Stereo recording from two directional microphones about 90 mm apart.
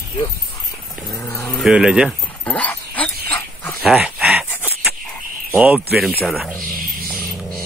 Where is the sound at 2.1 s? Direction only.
15° left (ahead or behind).